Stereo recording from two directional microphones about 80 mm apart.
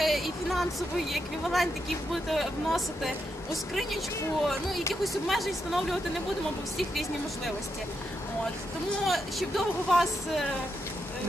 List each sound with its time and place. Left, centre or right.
0.0 s a woman's voice: centre
4.5 s a woman's voice: centre
9.0 s a woman's voice: centre